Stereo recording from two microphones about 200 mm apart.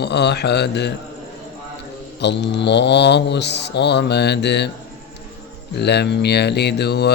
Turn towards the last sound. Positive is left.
turn(degrees=55)  # may be behind; listen again after turning